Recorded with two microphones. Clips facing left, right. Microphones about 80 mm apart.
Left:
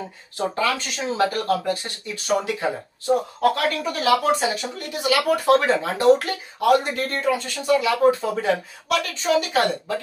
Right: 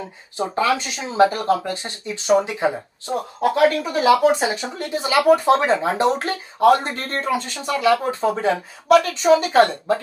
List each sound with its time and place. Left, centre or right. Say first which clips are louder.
0.4 s speech: right 3 dB; centre